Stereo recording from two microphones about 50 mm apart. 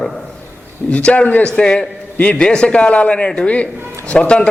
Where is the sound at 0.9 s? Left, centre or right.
Left.